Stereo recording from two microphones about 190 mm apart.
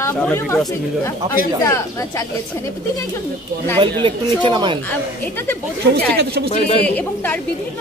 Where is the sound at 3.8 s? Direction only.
25° right (ahead or behind).